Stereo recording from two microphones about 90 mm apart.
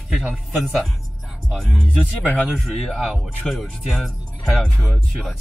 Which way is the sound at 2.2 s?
20° left (ahead or behind).